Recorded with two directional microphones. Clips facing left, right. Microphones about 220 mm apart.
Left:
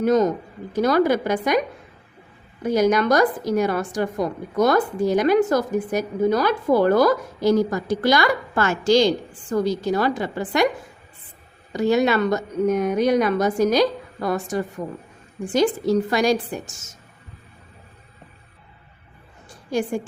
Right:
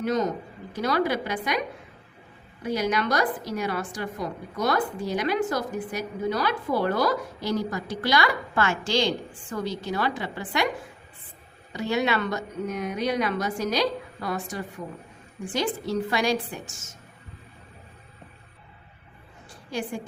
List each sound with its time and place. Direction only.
0.0 s a woman's voice: 45° left (ahead or behind)
2.6 s a woman's voice: 45° left (ahead or behind)
11.7 s a woman's voice: 45° left (ahead or behind)
19.5 s a sound: 45° left (ahead or behind)